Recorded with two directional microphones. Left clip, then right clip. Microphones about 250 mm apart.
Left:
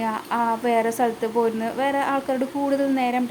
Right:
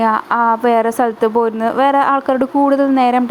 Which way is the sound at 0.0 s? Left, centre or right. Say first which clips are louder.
Right 10 dB; centre.